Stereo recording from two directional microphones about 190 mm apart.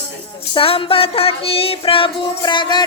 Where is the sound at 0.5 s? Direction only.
30° left (ahead or behind).